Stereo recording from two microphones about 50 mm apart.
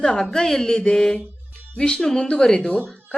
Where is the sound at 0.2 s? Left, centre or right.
Centre.